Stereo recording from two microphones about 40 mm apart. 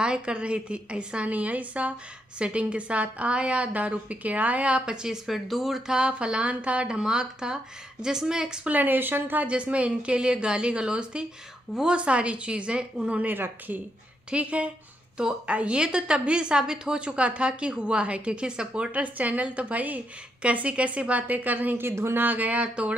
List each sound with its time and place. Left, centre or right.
0.0 s a woman's voice: right
1.3 s a woman's voice: right
4.8 s a woman's voice: centre
5.2 s speech: centre
5.9 s a woman's voice: right
6.9 s a woman's voice: centre
8.6 s speech: right
9.5 s a woman's voice: right
14.3 s a woman's voice: right
15.8 s a woman's voice: centre
18.9 s a woman's voice: right
21.7 s a woman's voice: right
22.2 s a woman's voice: right